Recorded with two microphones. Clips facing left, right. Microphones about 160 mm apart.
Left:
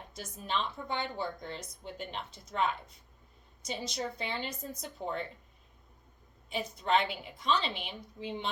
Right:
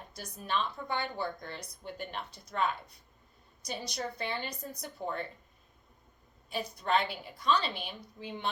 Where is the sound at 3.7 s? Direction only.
25° left (ahead or behind).